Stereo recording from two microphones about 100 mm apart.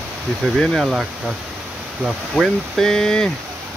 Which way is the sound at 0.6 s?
5° left (ahead or behind).